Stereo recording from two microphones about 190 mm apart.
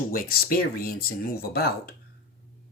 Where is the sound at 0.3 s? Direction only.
50° left (ahead or behind).